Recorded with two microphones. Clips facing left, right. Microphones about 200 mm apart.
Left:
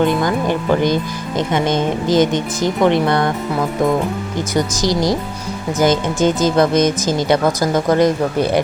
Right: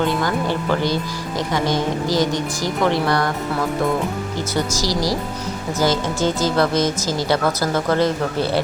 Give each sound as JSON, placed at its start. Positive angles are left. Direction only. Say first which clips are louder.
{"t": 0.0, "sound": "speech", "louder": "left 4 dB", "side_deg": 20}
{"t": 4.5, "sound": "speech", "louder": "left 5 dB", "side_deg": 20}